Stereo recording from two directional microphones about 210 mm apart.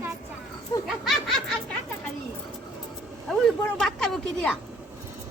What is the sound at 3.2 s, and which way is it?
Speech, centre (ahead or behind).